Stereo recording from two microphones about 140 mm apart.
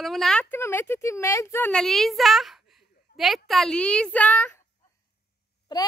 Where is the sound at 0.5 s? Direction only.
15° left (ahead or behind).